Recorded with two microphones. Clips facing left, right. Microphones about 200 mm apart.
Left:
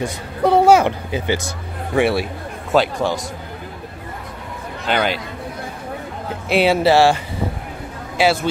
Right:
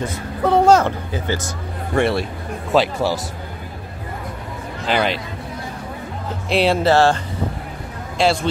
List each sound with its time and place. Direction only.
0.0 s speech: 15° left (ahead or behind)
2.0 s speech: 5° left (ahead or behind)
4.8 s speech: centre (ahead or behind)
6.5 s speech: 5° left (ahead or behind)
8.2 s speech: 5° left (ahead or behind)